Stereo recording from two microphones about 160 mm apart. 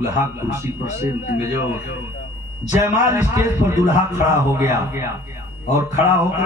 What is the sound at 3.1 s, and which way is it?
A man's voice, 15° right (ahead or behind).